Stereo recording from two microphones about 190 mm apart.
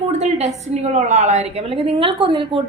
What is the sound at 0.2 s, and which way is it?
A woman's voice, 35° right (ahead or behind).